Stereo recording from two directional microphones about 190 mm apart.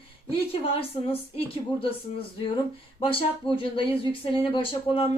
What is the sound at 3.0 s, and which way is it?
Speech, 30° left (ahead or behind).